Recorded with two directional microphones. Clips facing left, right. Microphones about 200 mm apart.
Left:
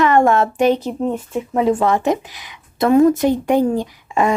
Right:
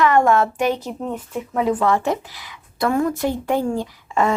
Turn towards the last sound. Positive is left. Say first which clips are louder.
# left 2 dB
turn(degrees=15)  # may be behind; listen again after turning